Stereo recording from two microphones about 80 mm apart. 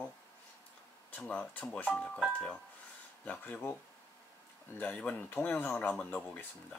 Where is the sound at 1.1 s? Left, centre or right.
Left.